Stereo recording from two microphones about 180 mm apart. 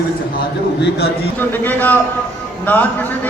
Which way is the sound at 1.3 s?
10° left (ahead or behind).